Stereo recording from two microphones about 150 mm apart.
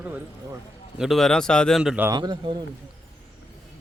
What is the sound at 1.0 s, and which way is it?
Speech, centre (ahead or behind).